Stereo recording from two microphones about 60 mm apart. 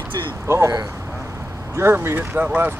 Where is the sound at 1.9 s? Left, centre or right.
Right.